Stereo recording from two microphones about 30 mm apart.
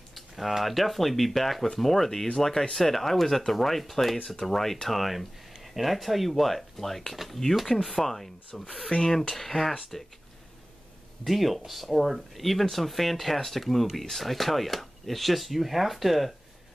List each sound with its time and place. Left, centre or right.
0.1 s speech: centre
8.9 s speech: left
9.3 s speech: centre
11.2 s speech: centre